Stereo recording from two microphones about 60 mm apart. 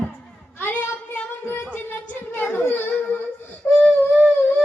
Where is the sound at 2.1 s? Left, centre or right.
Left.